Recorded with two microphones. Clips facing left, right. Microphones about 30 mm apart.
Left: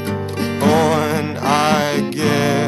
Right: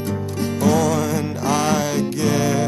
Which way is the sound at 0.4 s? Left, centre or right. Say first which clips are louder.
Left 3 dB; left.